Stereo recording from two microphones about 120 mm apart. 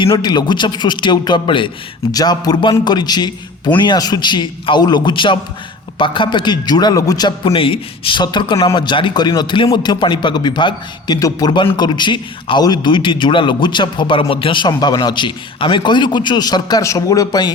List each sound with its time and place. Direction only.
0.1 s a man's voice: 35° left (ahead or behind)
2.1 s a man's voice: 35° left (ahead or behind)
7.4 s a man's voice: 50° left (ahead or behind); by 11.6 s 35° left (ahead or behind)
11.6 s a man's voice: 45° left (ahead or behind)